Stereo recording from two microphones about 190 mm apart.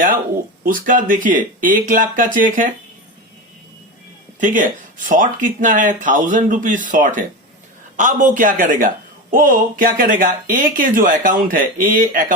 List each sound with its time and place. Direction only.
0.6 s speech: 45° right (ahead or behind)
4.4 s speech: 45° right (ahead or behind)